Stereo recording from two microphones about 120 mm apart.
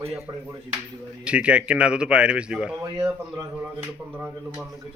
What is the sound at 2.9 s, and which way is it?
Speech, 30° right (ahead or behind).